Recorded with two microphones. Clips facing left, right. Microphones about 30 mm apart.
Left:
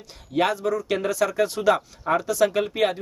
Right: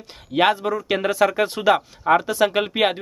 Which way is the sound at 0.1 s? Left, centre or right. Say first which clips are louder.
Right 4 dB; right.